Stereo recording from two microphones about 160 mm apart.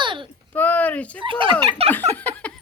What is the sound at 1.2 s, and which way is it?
Turkey, 30° right (ahead or behind).